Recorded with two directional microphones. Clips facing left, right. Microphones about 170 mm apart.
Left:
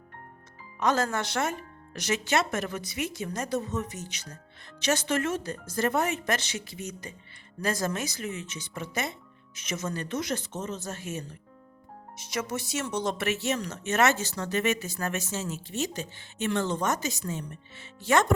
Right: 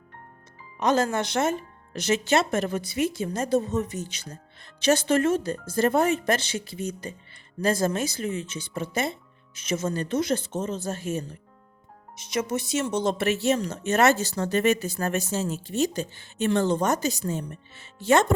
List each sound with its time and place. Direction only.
0.8 s speech: 20° right (ahead or behind)
12.1 s speech: 20° right (ahead or behind)